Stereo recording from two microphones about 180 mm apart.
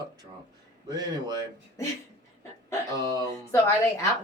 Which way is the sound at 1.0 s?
20° right (ahead or behind).